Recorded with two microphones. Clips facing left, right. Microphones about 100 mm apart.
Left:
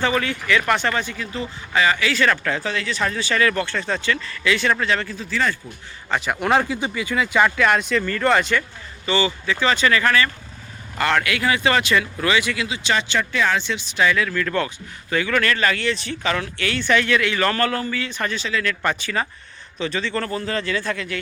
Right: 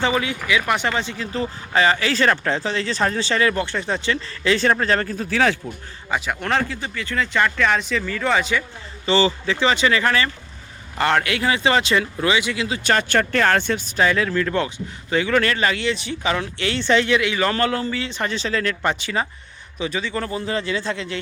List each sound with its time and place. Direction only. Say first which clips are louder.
0.0 s speech: even; 15° right (ahead or behind); by 5.3 s 45° right (ahead or behind)
5.3 s a man's voice: right 4 dB; 70° right (ahead or behind)
6.1 s a man's voice: left 1 dB; 5° right (ahead or behind)
6.4 s speech: left 3 dB; 15° left (ahead or behind); by 8.6 s 5° right (ahead or behind)
9.0 s speech: right 3 dB; 30° right (ahead or behind)
9.6 s speech: even; 20° right (ahead or behind)
12.6 s speech: right 2 dB; 45° right (ahead or behind); by 18.4 s 25° right (ahead or behind)
18.4 s speech: right 2 dB; 35° right (ahead or behind)
18.8 s a man's voice: right 1 dB; 20° right (ahead or behind)